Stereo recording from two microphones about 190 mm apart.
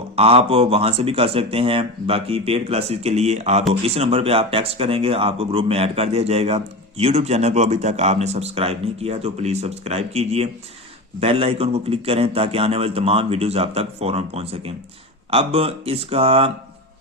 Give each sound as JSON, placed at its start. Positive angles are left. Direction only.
{"t": 0.2, "sound": "speech", "side_deg": -30}